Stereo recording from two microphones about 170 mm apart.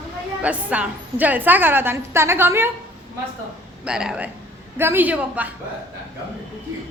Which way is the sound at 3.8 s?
5° right (ahead or behind).